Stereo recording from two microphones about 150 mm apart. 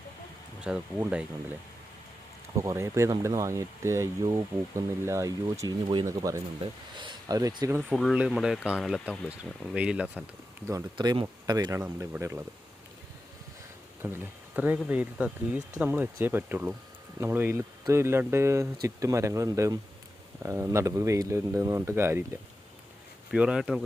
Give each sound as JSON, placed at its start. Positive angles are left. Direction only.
{"t": 0.6, "sound": "speech", "side_deg": -5}
{"t": 2.6, "sound": "speech", "side_deg": -20}
{"t": 7.8, "sound": "speech", "side_deg": 0}
{"t": 10.7, "sound": "speech", "side_deg": -25}
{"t": 11.8, "sound": "speech", "side_deg": -15}
{"t": 14.0, "sound": "speech", "side_deg": -15}
{"t": 23.3, "sound": "speech", "side_deg": -5}